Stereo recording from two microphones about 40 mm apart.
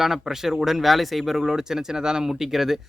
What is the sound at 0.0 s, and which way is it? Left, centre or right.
Speech, centre.